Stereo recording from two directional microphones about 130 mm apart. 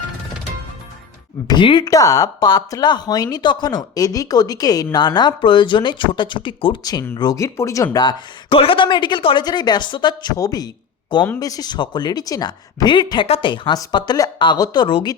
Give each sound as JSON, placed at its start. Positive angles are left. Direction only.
{"t": 1.5, "sound": "speech", "side_deg": 40}
{"t": 1.8, "sound": "speech", "side_deg": 25}